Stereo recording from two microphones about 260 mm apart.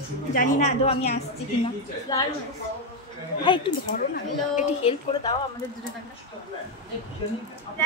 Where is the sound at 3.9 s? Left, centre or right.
Left.